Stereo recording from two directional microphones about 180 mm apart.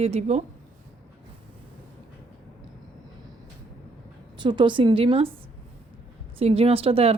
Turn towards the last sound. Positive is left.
turn(degrees=-35)  # may be behind; listen again after turning